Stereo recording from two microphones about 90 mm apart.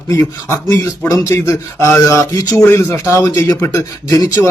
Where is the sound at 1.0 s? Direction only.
35° left (ahead or behind).